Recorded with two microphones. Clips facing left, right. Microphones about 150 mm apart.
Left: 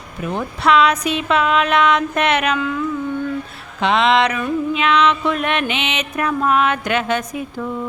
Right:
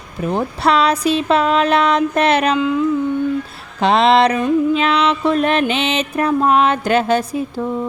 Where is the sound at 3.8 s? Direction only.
35° right (ahead or behind).